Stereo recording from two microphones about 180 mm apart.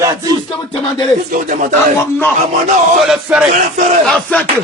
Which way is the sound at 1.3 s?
45° right (ahead or behind).